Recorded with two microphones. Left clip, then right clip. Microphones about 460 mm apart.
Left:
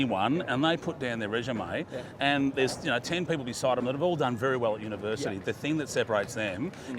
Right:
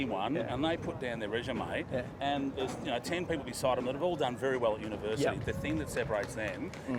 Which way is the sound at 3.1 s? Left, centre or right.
Left.